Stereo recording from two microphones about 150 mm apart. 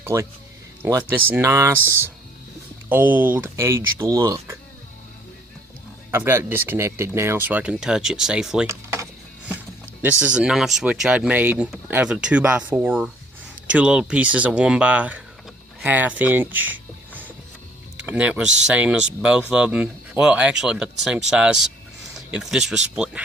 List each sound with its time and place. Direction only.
0.0 s speech: 20° right (ahead or behind)
6.1 s speech: 15° right (ahead or behind)
8.6 s a sound: 20° right (ahead or behind)
10.0 s speech: 10° right (ahead or behind)
18.0 s speech: 10° right (ahead or behind)